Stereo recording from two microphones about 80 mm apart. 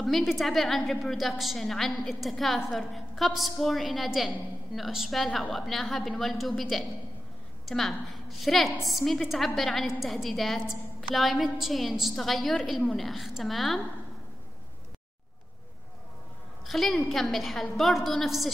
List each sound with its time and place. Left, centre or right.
0.0 s a woman's voice: centre
16.6 s a woman's voice: centre